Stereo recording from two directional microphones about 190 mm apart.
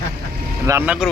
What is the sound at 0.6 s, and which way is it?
Speech, 10° right (ahead or behind).